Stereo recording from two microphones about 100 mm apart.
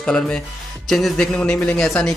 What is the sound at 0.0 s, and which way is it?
A man's voice, 10° left (ahead or behind).